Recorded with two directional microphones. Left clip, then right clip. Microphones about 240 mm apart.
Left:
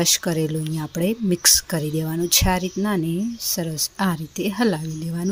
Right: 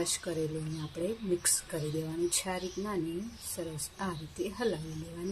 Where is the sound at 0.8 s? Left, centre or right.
Left.